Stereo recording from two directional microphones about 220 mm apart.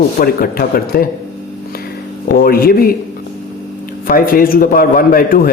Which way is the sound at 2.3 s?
40° left (ahead or behind).